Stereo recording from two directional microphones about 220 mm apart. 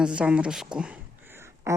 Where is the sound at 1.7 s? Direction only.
15° right (ahead or behind).